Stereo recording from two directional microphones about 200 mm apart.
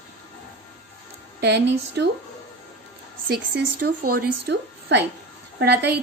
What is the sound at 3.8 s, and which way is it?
A woman's voice, 50° right (ahead or behind).